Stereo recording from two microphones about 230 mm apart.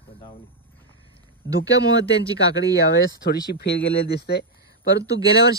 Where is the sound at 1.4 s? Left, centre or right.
Left.